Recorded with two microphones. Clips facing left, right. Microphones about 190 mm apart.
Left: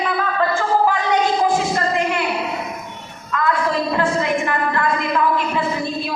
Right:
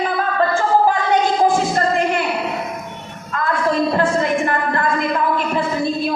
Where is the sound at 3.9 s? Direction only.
40° right (ahead or behind).